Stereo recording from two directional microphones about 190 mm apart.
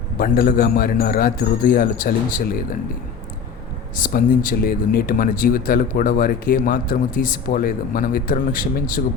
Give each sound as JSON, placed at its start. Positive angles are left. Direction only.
{"t": 0.2, "sound": "speech", "side_deg": 50}
{"t": 3.9, "sound": "speech", "side_deg": 45}